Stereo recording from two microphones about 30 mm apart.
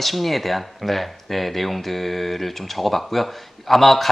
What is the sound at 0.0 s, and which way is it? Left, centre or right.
Speech, centre.